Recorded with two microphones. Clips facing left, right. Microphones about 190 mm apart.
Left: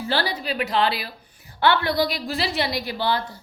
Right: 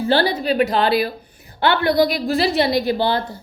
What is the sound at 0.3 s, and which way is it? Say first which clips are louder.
A woman's voice: right 6 dB; 45° right (ahead or behind).